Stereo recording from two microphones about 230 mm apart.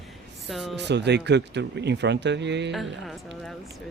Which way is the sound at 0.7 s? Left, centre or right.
Right.